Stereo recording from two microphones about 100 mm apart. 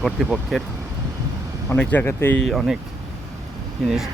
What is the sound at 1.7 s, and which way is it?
Speech, 15° left (ahead or behind).